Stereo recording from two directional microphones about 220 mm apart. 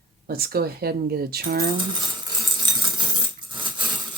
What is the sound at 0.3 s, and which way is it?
Speech, 45° right (ahead or behind).